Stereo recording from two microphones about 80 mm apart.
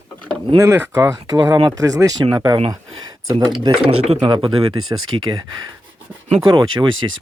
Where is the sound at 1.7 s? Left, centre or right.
Right.